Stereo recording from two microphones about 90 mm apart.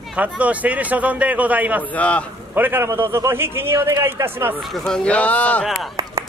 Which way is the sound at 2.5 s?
25° right (ahead or behind).